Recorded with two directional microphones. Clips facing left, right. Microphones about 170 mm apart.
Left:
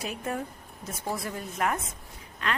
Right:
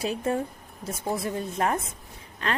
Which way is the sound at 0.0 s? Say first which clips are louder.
Right 6 dB; 30° right (ahead or behind).